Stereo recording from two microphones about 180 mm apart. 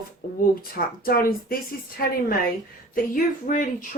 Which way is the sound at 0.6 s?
55° left (ahead or behind).